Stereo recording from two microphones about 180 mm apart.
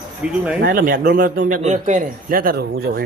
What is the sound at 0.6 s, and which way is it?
A man's voice, 50° right (ahead or behind).